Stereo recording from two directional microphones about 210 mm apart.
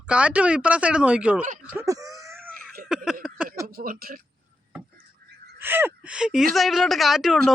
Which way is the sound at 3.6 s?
45° right (ahead or behind).